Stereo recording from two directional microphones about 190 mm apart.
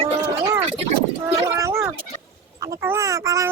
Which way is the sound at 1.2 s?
15° right (ahead or behind).